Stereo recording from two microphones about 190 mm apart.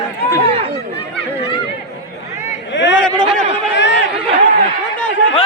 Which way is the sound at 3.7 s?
65° left (ahead or behind).